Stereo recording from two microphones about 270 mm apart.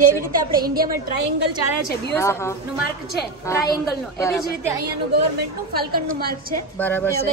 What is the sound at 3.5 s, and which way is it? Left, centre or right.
Speech, centre.